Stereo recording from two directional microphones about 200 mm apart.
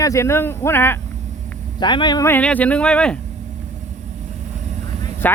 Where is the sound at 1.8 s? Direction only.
20° left (ahead or behind); by 3.2 s 5° left (ahead or behind).